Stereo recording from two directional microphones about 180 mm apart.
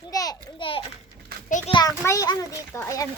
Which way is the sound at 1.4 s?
45° left (ahead or behind).